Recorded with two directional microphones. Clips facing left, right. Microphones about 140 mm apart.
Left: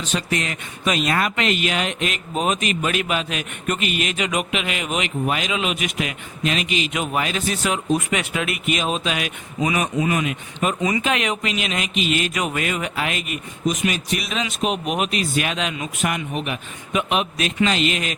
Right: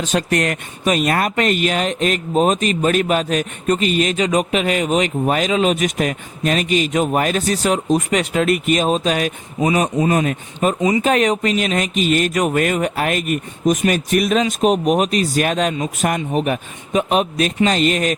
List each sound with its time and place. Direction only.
0.0 s speech: 45° right (ahead or behind)